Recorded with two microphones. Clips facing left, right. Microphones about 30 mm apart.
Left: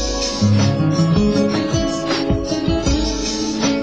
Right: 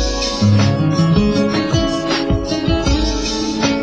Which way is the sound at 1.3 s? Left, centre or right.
Right.